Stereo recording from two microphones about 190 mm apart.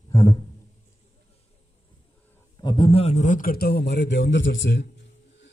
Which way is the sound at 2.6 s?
25° left (ahead or behind).